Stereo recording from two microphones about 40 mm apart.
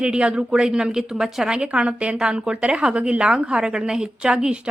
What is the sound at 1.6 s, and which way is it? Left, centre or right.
A woman's voice, right.